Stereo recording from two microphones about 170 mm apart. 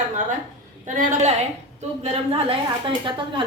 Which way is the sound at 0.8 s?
45° right (ahead or behind).